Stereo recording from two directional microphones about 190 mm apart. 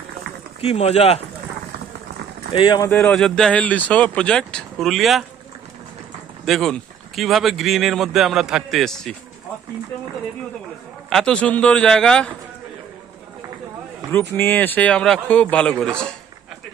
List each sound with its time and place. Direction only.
0.6 s speech: 35° left (ahead or behind)
2.5 s speech: 25° left (ahead or behind)
2.8 s speech: 10° left (ahead or behind)
6.4 s speech: centre (ahead or behind)
11.1 s speech: 5° left (ahead or behind)
14.3 s speech: 10° left (ahead or behind)